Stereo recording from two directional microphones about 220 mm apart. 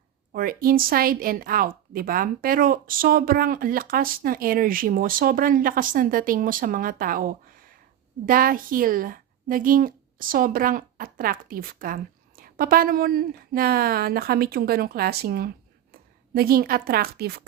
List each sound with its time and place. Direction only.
0.3 s a woman's voice: 40° right (ahead or behind)